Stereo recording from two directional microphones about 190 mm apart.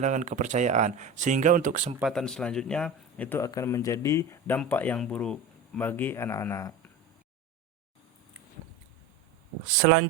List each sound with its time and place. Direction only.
0.0 s speech: 40° right (ahead or behind)
2.0 s a man's voice: centre (ahead or behind)